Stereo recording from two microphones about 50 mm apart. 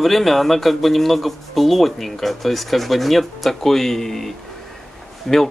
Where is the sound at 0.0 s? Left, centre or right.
Centre.